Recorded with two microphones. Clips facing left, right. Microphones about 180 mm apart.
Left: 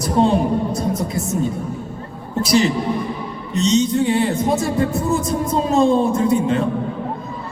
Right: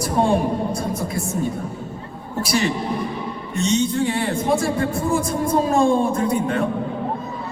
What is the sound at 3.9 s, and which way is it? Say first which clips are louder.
Speech: left 4 dB; 25° left (ahead or behind).